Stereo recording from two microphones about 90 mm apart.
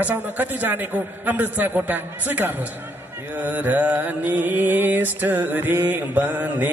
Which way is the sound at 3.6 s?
20° right (ahead or behind).